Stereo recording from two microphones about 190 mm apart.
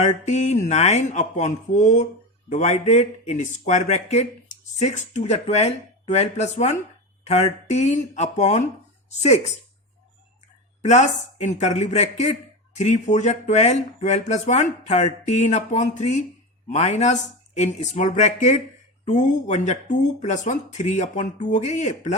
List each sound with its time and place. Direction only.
0.0 s speech: 35° left (ahead or behind)
10.8 s speech: 35° left (ahead or behind)